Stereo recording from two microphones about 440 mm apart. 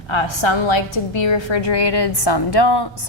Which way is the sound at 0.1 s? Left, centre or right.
Left.